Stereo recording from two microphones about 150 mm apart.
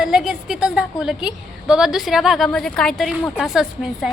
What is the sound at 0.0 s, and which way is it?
A woman's voice, 5° right (ahead or behind).